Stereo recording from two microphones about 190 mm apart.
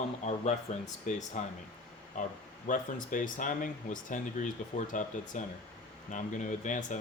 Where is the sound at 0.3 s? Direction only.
35° left (ahead or behind).